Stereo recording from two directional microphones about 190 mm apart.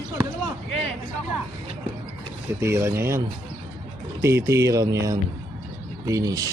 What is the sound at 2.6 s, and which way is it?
Speech, 15° right (ahead or behind).